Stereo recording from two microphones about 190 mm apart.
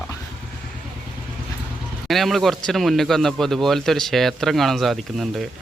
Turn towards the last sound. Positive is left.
turn(degrees=0)  # may be behind; listen again after turning